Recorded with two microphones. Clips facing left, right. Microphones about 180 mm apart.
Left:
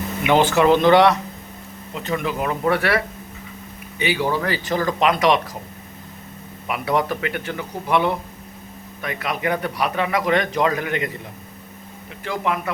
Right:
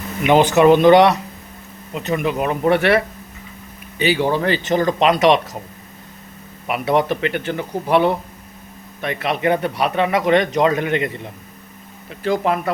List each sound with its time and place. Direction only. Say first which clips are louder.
0.3 s a man's voice: right 4 dB; 15° right (ahead or behind)
6.7 s a man's voice: right 4 dB; 25° right (ahead or behind)
12.2 s speech: right 5 dB; 35° right (ahead or behind)